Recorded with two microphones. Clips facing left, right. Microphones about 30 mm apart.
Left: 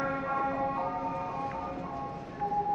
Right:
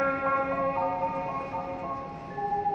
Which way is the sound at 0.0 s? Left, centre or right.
Right.